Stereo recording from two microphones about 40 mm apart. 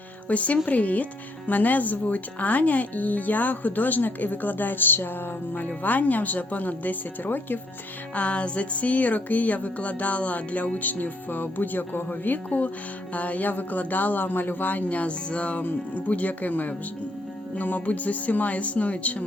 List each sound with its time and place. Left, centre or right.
0.3 s music: left
1.5 s speech: left
5.5 s speech: left
8.1 s music: left
12.5 s music: left
13.1 s speech: left
17.6 s music: left